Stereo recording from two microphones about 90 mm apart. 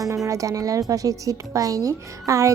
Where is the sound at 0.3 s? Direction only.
40° right (ahead or behind).